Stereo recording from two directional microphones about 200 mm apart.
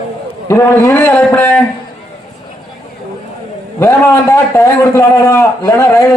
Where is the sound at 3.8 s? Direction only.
10° left (ahead or behind).